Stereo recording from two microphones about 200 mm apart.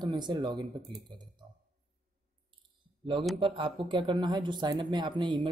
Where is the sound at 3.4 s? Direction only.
25° right (ahead or behind).